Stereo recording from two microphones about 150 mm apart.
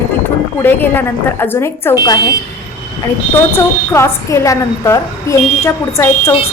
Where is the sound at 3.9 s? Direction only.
20° left (ahead or behind).